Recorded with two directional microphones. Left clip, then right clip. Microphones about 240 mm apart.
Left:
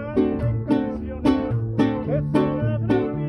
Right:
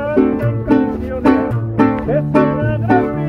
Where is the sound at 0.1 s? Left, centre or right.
Left.